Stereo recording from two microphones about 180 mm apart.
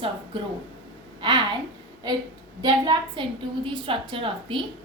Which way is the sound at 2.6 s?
25° right (ahead or behind).